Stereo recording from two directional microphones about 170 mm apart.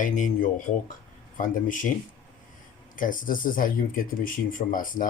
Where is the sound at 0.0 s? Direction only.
50° left (ahead or behind).